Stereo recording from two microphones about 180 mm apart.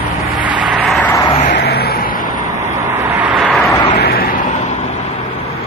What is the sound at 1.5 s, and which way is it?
Vehicle, 60° left (ahead or behind).